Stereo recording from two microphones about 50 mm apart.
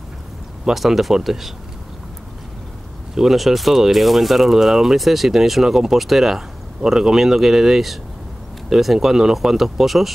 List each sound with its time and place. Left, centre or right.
0.7 s speech: centre
3.2 s speech: centre